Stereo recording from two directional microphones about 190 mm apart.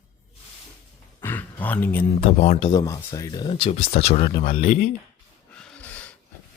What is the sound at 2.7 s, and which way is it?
Speech, 20° left (ahead or behind).